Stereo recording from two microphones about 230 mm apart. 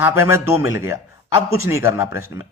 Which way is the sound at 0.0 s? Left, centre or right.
Centre.